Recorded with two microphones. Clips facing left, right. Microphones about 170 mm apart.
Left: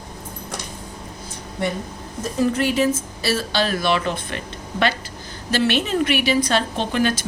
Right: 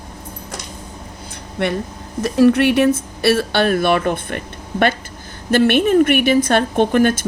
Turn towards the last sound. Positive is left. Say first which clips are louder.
# right 7 dB
turn(degrees=-55)  # may be behind; listen again after turning